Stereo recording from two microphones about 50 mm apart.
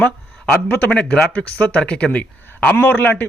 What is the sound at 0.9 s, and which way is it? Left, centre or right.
Speech, centre.